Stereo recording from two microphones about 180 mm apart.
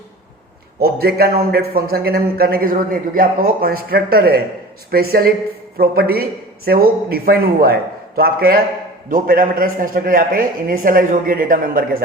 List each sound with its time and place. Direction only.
0.8 s a man's voice: 60° right (ahead or behind)